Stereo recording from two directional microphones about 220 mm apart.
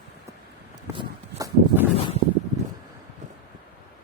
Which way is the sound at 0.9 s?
20° right (ahead or behind).